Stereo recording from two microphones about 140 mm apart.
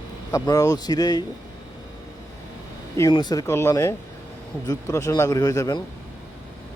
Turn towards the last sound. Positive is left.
turn(degrees=25)  # may be behind; listen again after turning